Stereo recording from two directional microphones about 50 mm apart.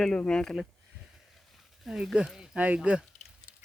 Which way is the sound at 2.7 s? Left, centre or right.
Right.